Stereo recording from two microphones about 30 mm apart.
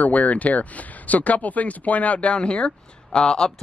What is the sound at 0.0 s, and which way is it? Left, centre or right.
Speech, left.